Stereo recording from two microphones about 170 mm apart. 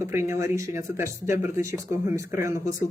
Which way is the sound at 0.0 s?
15° right (ahead or behind).